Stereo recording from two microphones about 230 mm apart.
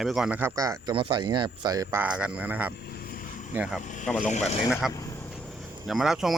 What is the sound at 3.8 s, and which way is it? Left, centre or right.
Vehicle, left.